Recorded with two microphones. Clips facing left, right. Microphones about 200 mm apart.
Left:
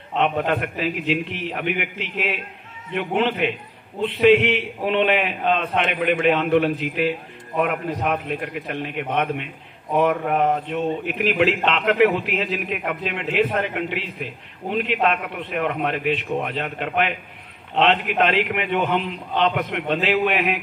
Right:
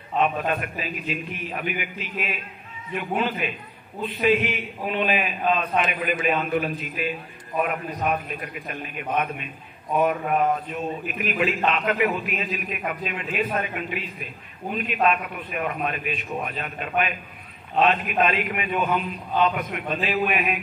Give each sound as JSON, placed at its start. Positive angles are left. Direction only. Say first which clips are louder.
{"t": 0.2, "sound": "a man's voice", "louder": "left 3 dB", "side_deg": 65}